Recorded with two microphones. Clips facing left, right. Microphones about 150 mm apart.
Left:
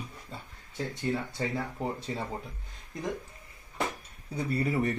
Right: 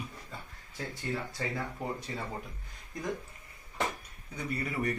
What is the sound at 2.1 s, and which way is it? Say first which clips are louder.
Speech: left 4 dB; 30° left (ahead or behind).